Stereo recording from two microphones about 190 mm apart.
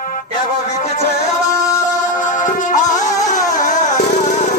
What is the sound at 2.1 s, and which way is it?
Music, 40° left (ahead or behind).